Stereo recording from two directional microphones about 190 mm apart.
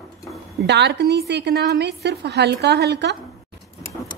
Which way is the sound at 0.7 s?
65° right (ahead or behind).